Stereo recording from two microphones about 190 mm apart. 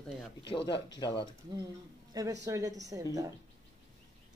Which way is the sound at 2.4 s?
20° right (ahead or behind).